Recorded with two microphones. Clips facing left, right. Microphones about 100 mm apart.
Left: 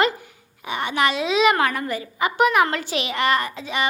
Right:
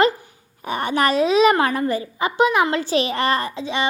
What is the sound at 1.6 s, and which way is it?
A woman's voice, 30° right (ahead or behind).